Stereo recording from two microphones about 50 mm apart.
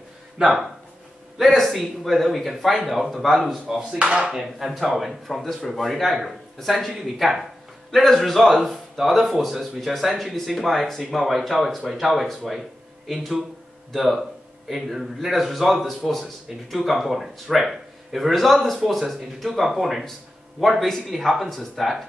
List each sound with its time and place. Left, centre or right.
0.4 s speech: centre